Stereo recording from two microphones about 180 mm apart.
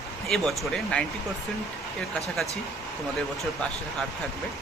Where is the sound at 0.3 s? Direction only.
Centre (ahead or behind).